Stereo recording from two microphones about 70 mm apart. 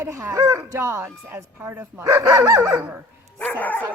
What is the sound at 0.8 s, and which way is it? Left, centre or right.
Speech, right.